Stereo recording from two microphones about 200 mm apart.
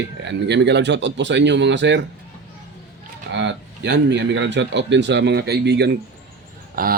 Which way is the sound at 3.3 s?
60° right (ahead or behind).